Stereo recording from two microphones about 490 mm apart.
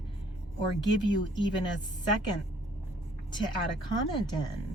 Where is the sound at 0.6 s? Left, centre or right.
Left.